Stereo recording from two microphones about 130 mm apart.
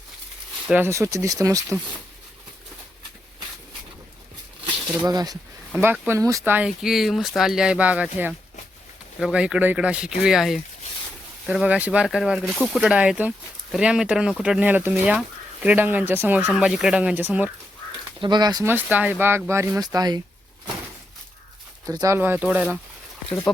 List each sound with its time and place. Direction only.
0.9 s speech: 25° right (ahead or behind)
5.0 s speech: 30° right (ahead or behind)
5.7 s speech: 15° right (ahead or behind)
6.7 s speech: 5° right (ahead or behind)
12.9 s speech: 10° right (ahead or behind)
18.2 s speech: 35° right (ahead or behind)
18.6 s speech: 15° right (ahead or behind)
21.8 s speech: 25° right (ahead or behind)